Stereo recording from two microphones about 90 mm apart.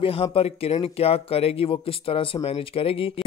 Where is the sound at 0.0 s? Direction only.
90° left.